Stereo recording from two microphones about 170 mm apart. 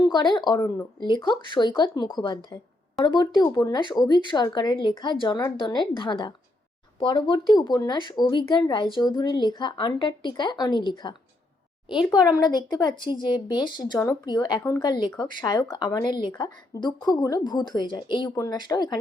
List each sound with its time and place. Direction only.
0.0 s speech: 25° left (ahead or behind)
12.1 s speech: 25° left (ahead or behind)